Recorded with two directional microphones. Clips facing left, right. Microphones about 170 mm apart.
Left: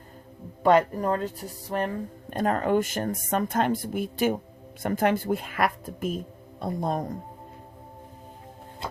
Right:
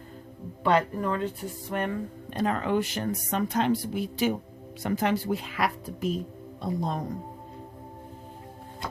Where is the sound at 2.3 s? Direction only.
45° left (ahead or behind).